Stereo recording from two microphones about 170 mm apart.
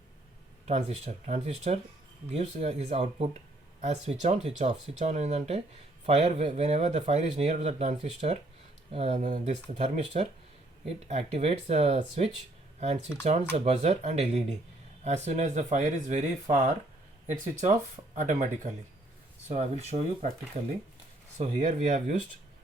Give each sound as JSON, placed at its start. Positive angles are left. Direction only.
{"t": 0.6, "sound": "speech", "side_deg": -40}
{"t": 13.7, "sound": "speech", "side_deg": -40}
{"t": 21.3, "sound": "speech", "side_deg": -45}